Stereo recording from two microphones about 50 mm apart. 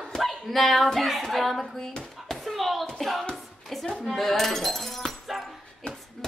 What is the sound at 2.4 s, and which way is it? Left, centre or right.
Bouncing, centre.